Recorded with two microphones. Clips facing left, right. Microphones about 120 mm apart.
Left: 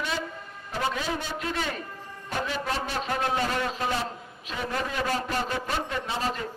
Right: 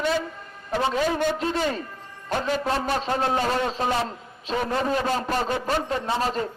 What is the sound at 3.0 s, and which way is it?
A man's voice, 30° right (ahead or behind).